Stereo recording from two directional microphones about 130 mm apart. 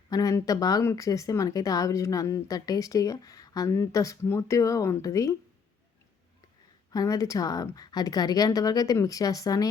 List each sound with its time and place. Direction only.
0.1 s speech: 25° left (ahead or behind)
6.9 s speech: 25° left (ahead or behind)